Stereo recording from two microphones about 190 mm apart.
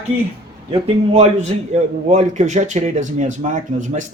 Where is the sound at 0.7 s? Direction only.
35° right (ahead or behind).